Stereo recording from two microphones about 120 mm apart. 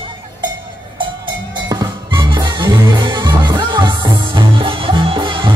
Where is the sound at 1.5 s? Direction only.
35° right (ahead or behind).